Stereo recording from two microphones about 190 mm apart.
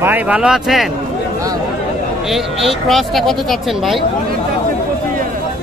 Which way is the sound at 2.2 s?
Centre (ahead or behind).